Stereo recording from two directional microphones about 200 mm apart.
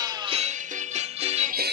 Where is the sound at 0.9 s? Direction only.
30° right (ahead or behind).